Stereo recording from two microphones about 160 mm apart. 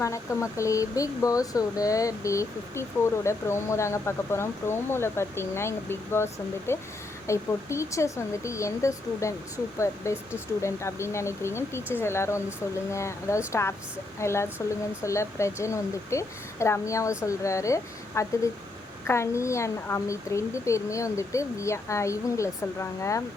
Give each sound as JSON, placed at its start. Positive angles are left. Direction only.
{"t": 0.0, "sound": "speech", "side_deg": 20}